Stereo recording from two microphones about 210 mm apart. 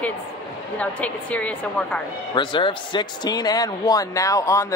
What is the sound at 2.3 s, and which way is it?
A man's voice, 25° left (ahead or behind).